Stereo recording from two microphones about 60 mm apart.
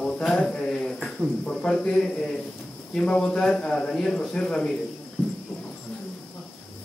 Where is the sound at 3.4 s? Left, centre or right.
Centre.